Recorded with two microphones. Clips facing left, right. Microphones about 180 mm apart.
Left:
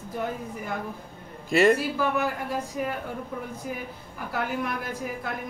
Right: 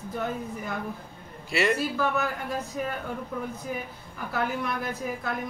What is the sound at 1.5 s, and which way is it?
Speech, 45° left (ahead or behind).